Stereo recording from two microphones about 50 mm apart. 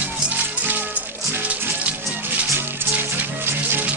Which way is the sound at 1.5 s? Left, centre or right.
Right.